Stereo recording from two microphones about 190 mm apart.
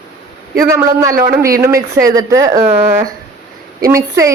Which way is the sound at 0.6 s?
15° right (ahead or behind).